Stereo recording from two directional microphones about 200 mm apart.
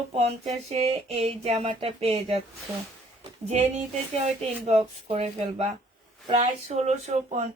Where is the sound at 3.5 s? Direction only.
35° right (ahead or behind).